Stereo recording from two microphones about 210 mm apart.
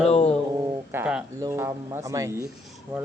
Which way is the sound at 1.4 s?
10° right (ahead or behind).